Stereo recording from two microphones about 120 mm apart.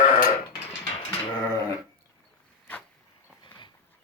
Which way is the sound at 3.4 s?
40° left (ahead or behind).